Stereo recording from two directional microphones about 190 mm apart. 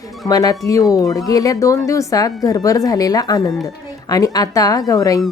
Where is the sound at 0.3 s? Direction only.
20° left (ahead or behind).